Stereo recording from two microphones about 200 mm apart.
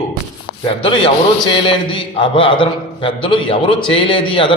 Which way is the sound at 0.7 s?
25° left (ahead or behind).